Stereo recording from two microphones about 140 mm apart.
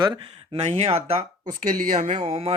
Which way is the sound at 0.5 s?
55° right (ahead or behind).